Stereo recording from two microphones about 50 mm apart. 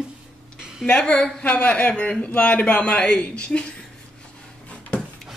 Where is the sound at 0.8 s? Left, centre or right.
Centre.